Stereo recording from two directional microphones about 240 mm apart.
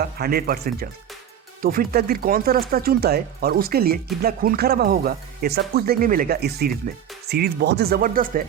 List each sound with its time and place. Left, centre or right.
0.0 s speech: right